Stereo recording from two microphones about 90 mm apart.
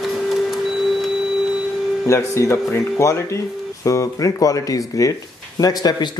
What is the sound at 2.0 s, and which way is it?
Speech, 35° left (ahead or behind).